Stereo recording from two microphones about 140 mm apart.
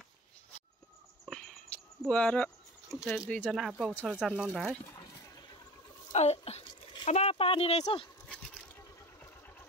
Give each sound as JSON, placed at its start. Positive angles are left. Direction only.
{"t": 1.2, "sound": "a sound", "side_deg": 5}
{"t": 2.9, "sound": "speech", "side_deg": 0}
{"t": 3.3, "sound": "speech", "side_deg": 10}
{"t": 4.4, "sound": "speech", "side_deg": -5}
{"t": 4.6, "sound": "a sound", "side_deg": 20}
{"t": 6.1, "sound": "speech", "side_deg": 45}